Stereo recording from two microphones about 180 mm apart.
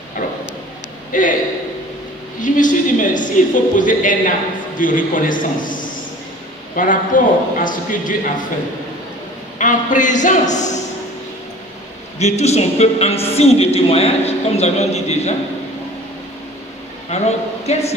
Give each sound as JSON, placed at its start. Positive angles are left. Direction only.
{"t": 1.1, "sound": "a man's voice", "side_deg": 45}
{"t": 2.4, "sound": "a man's voice", "side_deg": 45}
{"t": 9.6, "sound": "a man's voice", "side_deg": 45}
{"t": 12.2, "sound": "a man's voice", "side_deg": 40}
{"t": 17.1, "sound": "a man's voice", "side_deg": 40}